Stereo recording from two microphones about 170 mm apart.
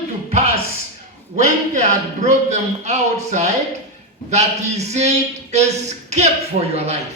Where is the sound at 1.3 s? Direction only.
45° right (ahead or behind).